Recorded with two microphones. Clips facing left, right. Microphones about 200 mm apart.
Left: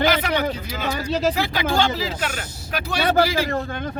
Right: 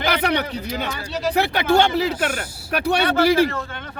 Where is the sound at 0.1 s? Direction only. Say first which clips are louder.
Even; 65° right (ahead or behind).